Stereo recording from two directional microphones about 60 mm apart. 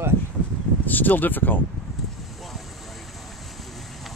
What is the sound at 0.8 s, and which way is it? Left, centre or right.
Speech, left.